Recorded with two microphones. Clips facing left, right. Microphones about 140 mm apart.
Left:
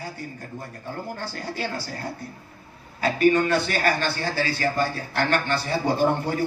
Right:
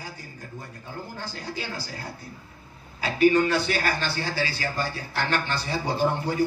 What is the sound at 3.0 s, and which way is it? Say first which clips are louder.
A man's voice: left 1 dB; 50° left (ahead or behind).